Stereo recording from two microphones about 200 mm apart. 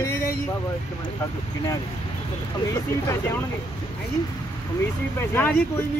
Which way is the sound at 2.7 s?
15° left (ahead or behind).